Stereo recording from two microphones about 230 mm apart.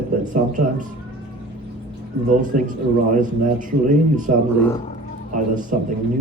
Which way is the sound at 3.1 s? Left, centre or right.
Right.